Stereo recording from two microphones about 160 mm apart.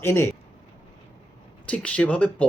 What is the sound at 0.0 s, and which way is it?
Speech, 15° left (ahead or behind).